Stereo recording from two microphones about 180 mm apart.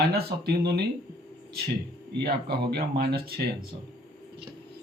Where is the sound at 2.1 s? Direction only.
65° right (ahead or behind).